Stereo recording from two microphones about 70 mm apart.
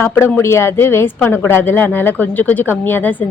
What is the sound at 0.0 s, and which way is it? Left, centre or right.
A woman's voice, left.